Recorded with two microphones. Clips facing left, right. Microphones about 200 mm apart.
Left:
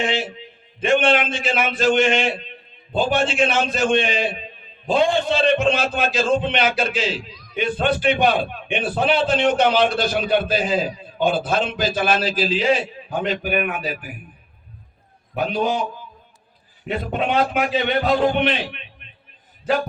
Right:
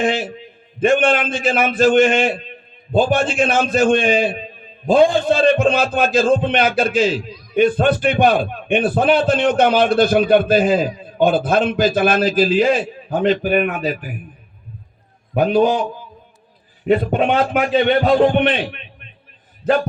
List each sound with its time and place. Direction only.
0.0 s a man's voice: 50° right (ahead or behind)
13.1 s a man's voice: 35° right (ahead or behind)
15.4 s a man's voice: 50° right (ahead or behind)
16.8 s a man's voice: 50° right (ahead or behind)